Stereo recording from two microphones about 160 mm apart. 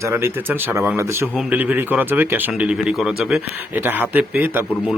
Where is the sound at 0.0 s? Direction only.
15° right (ahead or behind).